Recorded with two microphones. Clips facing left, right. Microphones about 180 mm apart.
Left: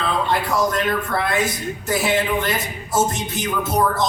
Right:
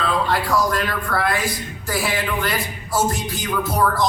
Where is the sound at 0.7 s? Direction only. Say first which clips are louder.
Left 2 dB; 25° left (ahead or behind).